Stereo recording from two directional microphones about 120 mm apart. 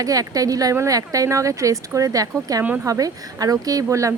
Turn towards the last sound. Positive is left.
turn(degrees=-25)  # may be behind; listen again after turning